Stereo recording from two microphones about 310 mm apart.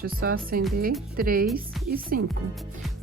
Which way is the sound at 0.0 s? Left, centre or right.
Right.